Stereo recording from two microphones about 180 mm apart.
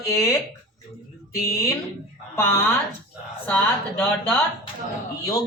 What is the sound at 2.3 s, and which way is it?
A woman's voice, 15° left (ahead or behind).